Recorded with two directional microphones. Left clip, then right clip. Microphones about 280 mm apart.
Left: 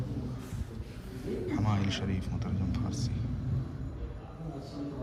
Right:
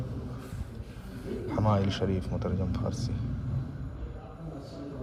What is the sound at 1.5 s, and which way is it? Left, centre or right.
Speech, centre.